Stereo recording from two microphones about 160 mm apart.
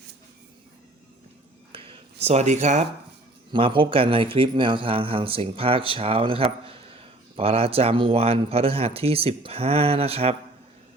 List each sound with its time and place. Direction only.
1.7 s a sound: 35° right (ahead or behind)
2.2 s speech: 45° right (ahead or behind)
3.5 s speech: 30° right (ahead or behind)